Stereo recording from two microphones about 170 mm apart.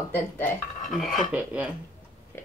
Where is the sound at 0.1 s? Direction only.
10° left (ahead or behind).